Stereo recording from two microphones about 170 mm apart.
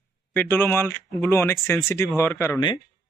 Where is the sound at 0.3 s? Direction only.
10° left (ahead or behind).